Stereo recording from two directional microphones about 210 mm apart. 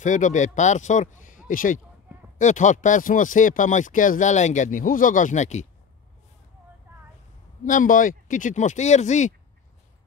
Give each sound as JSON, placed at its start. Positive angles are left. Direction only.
{"t": 0.0, "sound": "speech", "side_deg": 35}
{"t": 7.6, "sound": "speech", "side_deg": 40}